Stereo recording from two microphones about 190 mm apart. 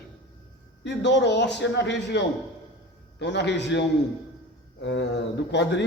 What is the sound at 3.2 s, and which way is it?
Speech, 65° left (ahead or behind).